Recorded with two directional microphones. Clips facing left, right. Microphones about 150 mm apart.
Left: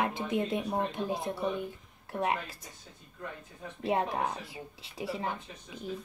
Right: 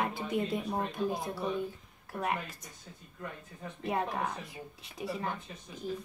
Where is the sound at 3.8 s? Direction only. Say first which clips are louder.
Left 3 dB; 25° left (ahead or behind).